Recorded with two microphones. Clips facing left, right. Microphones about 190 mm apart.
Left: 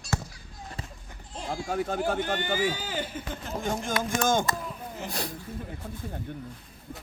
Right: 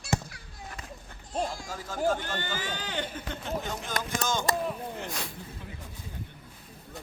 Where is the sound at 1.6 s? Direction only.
60° left (ahead or behind).